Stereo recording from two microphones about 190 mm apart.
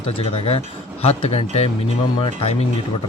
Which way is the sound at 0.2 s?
30° left (ahead or behind).